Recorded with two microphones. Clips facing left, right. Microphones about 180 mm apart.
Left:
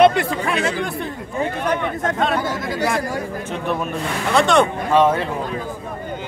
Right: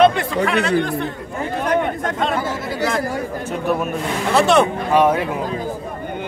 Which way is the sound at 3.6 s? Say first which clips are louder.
Right 3 dB; 5° right (ahead or behind).